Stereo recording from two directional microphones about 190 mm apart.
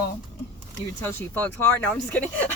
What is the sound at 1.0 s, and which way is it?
Speech, 10° left (ahead or behind).